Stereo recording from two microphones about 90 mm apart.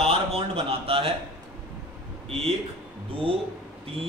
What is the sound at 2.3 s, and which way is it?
Speech, 90° right.